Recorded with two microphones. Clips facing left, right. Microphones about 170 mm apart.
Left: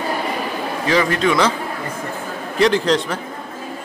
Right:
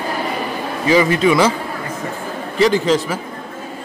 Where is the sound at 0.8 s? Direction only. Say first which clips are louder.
Right 4 dB; 5° right (ahead or behind).